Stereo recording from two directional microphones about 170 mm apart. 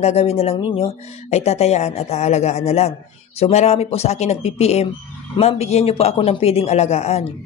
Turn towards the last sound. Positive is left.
turn(degrees=40)  # may be behind; listen again after turning